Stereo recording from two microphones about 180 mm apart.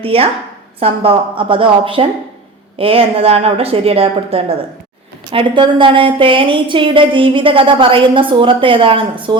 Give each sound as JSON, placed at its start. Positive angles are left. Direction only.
{"t": 0.0, "sound": "a woman's voice", "side_deg": -30}